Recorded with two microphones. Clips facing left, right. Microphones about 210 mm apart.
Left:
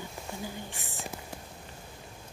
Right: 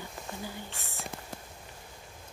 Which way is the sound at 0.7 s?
15° left (ahead or behind).